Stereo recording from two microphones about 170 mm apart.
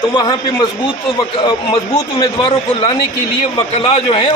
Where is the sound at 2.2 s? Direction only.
30° left (ahead or behind).